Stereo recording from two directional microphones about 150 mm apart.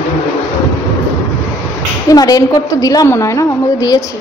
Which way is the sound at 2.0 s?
25° left (ahead or behind).